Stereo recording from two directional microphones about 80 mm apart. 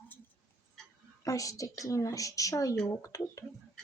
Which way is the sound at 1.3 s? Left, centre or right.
Left.